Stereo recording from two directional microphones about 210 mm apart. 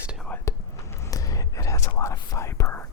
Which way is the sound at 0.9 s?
15° left (ahead or behind).